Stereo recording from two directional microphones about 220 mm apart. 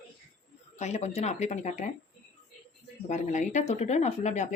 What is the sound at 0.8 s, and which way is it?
Speech, 30° left (ahead or behind).